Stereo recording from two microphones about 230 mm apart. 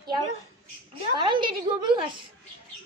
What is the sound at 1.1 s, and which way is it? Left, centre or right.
Speech, right.